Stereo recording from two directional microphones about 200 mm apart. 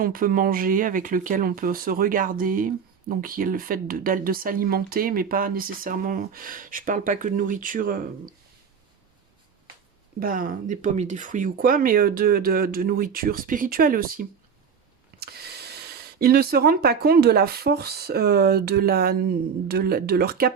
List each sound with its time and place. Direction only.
0.0 s speech: 45° right (ahead or behind)
10.2 s speech: 45° right (ahead or behind)